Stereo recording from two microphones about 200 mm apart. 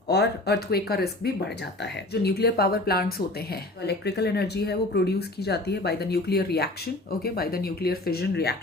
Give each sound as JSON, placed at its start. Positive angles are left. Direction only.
{"t": 0.1, "sound": "speech", "side_deg": 55}